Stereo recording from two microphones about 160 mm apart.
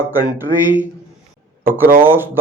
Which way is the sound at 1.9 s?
15° right (ahead or behind).